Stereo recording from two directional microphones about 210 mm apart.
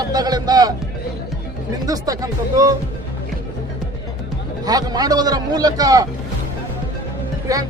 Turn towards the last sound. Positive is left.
turn(degrees=-15)  # may be behind; listen again after turning